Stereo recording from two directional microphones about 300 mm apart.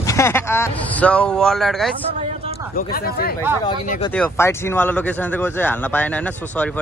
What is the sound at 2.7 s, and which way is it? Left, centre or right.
Speech, left.